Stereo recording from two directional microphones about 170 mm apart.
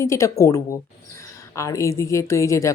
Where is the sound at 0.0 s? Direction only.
15° left (ahead or behind).